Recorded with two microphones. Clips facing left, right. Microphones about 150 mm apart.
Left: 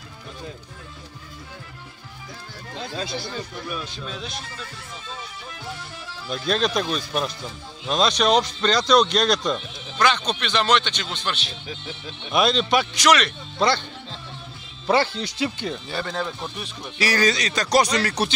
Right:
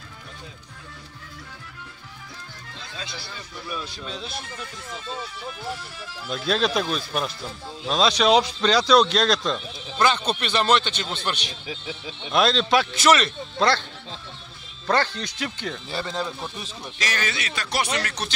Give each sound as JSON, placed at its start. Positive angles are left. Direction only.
{"t": 2.9, "sound": "speech", "side_deg": 45}
{"t": 6.2, "sound": "speech", "side_deg": 0}
{"t": 14.9, "sound": "speech", "side_deg": 10}
{"t": 15.9, "sound": "speech", "side_deg": 0}
{"t": 17.1, "sound": "speech", "side_deg": 35}